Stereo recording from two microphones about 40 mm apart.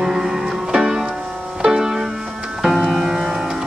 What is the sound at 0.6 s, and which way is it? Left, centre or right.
Music, centre.